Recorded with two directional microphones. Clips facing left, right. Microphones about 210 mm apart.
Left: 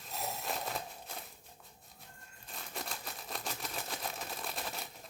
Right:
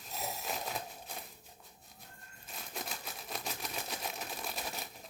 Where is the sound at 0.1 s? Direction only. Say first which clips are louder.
Left 1 dB; centre (ahead or behind).